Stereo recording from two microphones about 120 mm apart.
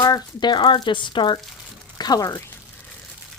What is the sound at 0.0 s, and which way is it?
Speech, 35° left (ahead or behind).